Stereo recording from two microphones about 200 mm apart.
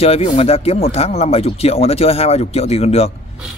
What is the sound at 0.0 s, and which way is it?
Speech, 30° left (ahead or behind).